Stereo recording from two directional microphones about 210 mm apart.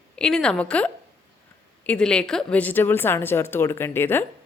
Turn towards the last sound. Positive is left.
turn(degrees=10)  # may be behind; listen again after turning